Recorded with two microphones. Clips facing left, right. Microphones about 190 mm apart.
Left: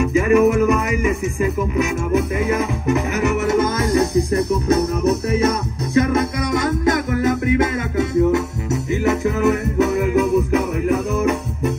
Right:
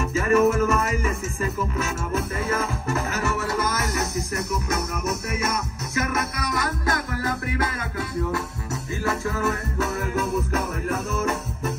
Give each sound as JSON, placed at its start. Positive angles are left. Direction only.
{"t": 0.0, "sound": "music", "side_deg": 15}